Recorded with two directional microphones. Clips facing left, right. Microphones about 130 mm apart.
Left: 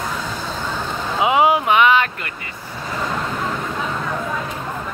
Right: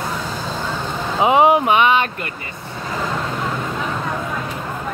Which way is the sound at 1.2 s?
30° right (ahead or behind).